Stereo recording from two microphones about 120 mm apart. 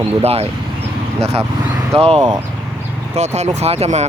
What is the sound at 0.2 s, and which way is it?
Speech, 55° right (ahead or behind).